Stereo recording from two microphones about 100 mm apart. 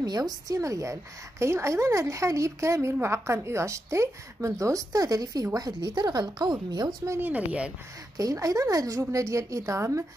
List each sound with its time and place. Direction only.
0.0 s a woman's voice: 40° right (ahead or behind)
7.1 s speech: 20° right (ahead or behind)
8.2 s a woman's voice: 35° right (ahead or behind)